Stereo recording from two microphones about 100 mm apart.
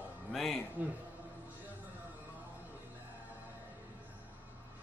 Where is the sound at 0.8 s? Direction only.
15° right (ahead or behind).